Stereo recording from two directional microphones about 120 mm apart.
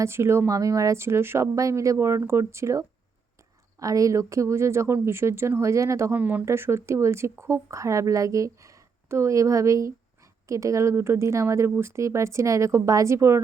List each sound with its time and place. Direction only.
0.0 s speech: 20° right (ahead or behind)